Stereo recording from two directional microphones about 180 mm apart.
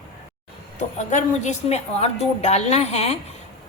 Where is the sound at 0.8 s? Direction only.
40° left (ahead or behind).